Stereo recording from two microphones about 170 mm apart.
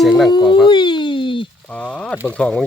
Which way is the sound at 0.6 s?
25° left (ahead or behind).